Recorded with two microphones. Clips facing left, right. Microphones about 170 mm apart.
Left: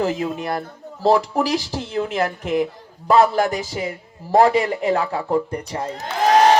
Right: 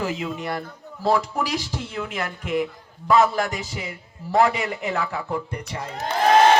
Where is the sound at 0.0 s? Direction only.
35° left (ahead or behind).